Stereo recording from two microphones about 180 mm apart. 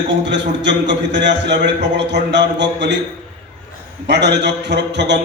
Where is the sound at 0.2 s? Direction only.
75° right (ahead or behind).